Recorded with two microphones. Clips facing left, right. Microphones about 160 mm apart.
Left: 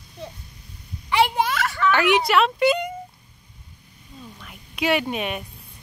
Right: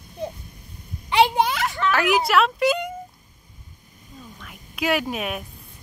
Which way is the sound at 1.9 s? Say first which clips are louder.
Left 2 dB; centre (ahead or behind).